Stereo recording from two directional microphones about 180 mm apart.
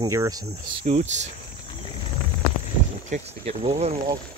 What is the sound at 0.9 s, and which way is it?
Speech, 40° right (ahead or behind).